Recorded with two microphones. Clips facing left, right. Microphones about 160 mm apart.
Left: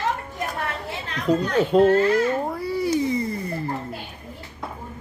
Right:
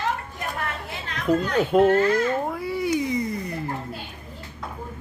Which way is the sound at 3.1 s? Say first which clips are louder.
Left 1 dB; 30° left (ahead or behind).